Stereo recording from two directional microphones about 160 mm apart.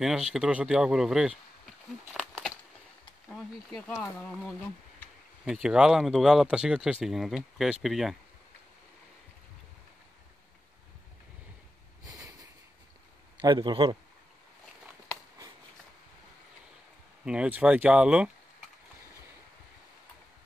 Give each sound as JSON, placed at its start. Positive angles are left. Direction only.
{"t": 0.0, "sound": "speech", "side_deg": -5}
{"t": 3.3, "sound": "speech", "side_deg": 5}
{"t": 12.1, "sound": "a sound", "side_deg": -20}
{"t": 13.4, "sound": "a man's voice", "side_deg": -25}
{"t": 17.2, "sound": "speech", "side_deg": -5}